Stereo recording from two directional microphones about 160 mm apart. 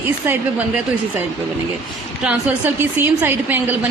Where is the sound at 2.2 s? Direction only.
10° right (ahead or behind).